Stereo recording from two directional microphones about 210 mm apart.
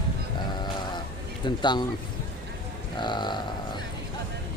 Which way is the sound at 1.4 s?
20° left (ahead or behind).